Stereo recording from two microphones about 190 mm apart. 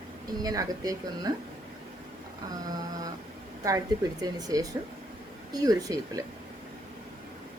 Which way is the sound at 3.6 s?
20° right (ahead or behind).